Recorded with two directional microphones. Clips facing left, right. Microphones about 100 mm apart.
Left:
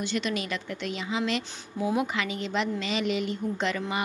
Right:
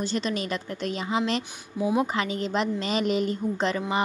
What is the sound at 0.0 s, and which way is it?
A woman's voice, 35° right (ahead or behind).